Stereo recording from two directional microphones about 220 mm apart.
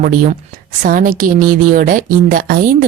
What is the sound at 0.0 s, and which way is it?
A woman's voice, 40° right (ahead or behind).